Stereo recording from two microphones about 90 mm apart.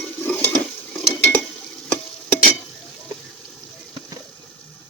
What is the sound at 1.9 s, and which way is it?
Stir, 15° left (ahead or behind).